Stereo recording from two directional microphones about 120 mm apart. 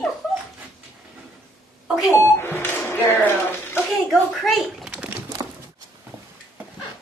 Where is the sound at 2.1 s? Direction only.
20° left (ahead or behind).